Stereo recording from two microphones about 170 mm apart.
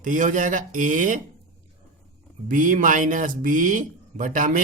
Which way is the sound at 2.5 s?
50° right (ahead or behind).